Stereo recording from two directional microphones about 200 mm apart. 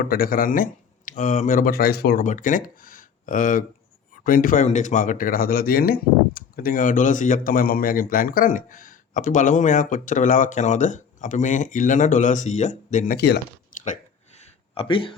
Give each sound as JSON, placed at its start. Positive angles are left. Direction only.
{"t": 0.0, "sound": "speech", "side_deg": 45}
{"t": 13.1, "sound": "speech", "side_deg": 55}
{"t": 13.8, "sound": "a sound", "side_deg": 35}